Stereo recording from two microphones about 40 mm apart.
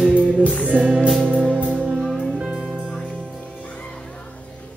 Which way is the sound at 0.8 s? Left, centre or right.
Right.